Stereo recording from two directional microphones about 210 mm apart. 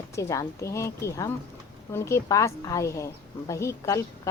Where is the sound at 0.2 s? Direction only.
15° left (ahead or behind).